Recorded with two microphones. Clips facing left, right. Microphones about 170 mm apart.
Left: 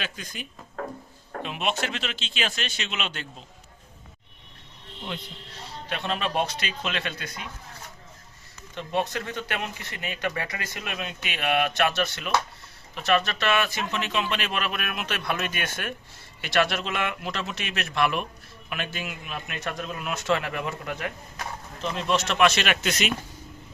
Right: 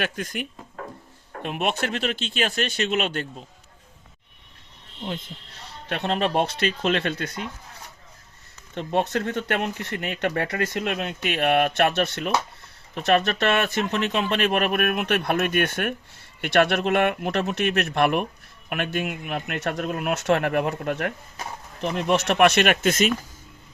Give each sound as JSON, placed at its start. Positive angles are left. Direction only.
{"t": 0.0, "sound": "speech", "side_deg": -60}
{"t": 5.9, "sound": "speech", "side_deg": -55}
{"t": 8.9, "sound": "speech", "side_deg": -60}